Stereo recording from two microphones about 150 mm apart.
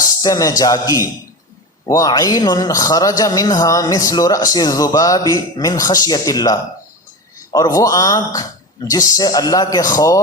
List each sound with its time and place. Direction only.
0.2 s a man's voice: 25° left (ahead or behind)